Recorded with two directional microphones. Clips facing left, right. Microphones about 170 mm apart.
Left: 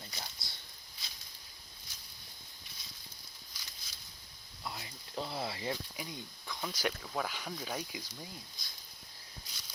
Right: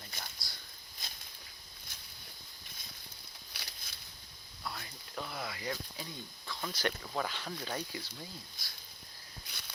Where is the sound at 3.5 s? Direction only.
65° right (ahead or behind).